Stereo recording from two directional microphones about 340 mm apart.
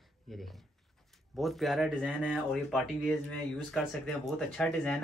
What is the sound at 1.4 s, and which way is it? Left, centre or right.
Speech, centre.